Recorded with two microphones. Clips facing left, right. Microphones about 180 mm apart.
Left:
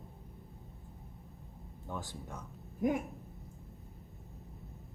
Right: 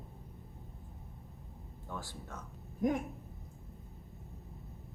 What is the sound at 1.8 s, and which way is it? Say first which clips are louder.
Speech: left 2 dB; 20° left (ahead or behind).